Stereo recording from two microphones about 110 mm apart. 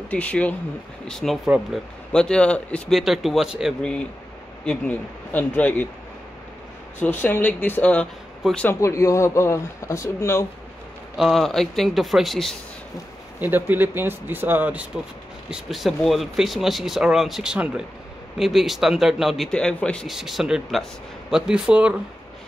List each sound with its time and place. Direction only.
0.1 s speech: 10° left (ahead or behind)
1.0 s speech: centre (ahead or behind)
3.0 s speech: centre (ahead or behind)
4.6 s speech: 15° left (ahead or behind)
7.0 s speech: 15° left (ahead or behind)
8.4 s speech: 5° right (ahead or behind)
8.8 s speech: 25° left (ahead or behind)
11.1 s speech: centre (ahead or behind)
13.4 s speech: 15° right (ahead or behind)
15.5 s speech: centre (ahead or behind)
20.1 s speech: centre (ahead or behind)